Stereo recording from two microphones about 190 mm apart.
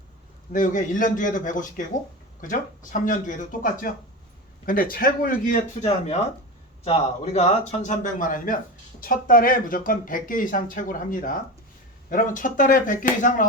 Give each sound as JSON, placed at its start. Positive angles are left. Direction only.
{"t": 0.5, "sound": "a man's voice", "side_deg": 45}